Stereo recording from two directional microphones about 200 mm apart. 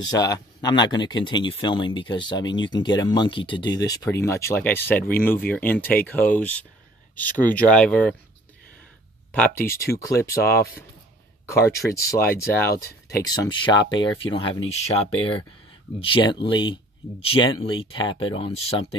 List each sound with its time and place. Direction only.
0.0 s speech: 20° left (ahead or behind)
9.3 s speech: 10° left (ahead or behind)
13.7 s speech: 65° left (ahead or behind)
14.3 s speech: 30° left (ahead or behind)